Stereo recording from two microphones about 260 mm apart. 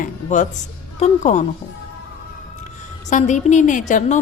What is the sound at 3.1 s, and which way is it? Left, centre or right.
A woman's voice, left.